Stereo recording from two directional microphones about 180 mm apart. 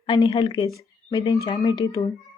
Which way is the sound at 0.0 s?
30° left (ahead or behind).